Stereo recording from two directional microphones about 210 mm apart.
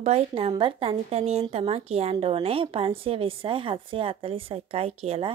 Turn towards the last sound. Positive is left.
turn(degrees=-30)  # may be behind; listen again after turning